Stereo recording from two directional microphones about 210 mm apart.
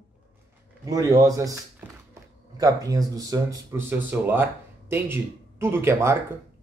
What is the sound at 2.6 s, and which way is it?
Speech, 15° right (ahead or behind).